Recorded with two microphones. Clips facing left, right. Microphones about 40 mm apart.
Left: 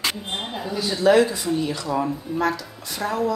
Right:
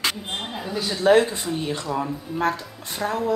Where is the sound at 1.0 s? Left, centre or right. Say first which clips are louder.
Even; right.